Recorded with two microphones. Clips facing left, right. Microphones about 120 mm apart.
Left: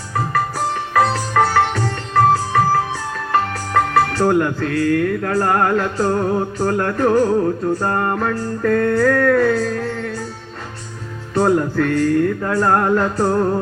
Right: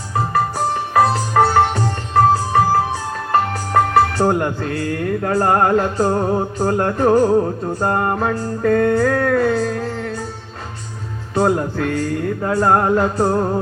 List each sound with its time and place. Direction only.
0.9 s music: 25° right (ahead or behind)
3.9 s music: 30° right (ahead or behind); by 10.1 s 10° right (ahead or behind)
11.3 s music: 10° right (ahead or behind)